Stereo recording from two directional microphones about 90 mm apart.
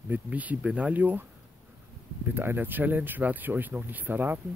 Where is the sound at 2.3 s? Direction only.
25° right (ahead or behind).